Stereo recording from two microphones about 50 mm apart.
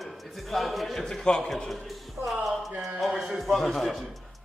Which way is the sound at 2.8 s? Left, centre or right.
Centre.